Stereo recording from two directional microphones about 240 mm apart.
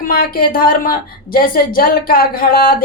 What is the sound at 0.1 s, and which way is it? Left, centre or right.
A woman's voice, left.